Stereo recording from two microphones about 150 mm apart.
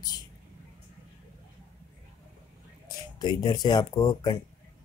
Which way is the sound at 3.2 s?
30° left (ahead or behind).